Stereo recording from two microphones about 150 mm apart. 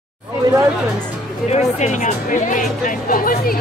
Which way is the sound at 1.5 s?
50° left (ahead or behind).